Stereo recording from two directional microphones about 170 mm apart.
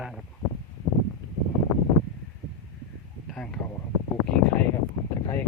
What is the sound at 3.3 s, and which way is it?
Speech, 5° left (ahead or behind).